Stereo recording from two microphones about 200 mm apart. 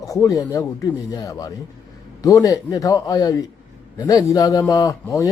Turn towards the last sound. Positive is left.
turn(degrees=15)  # may be behind; listen again after turning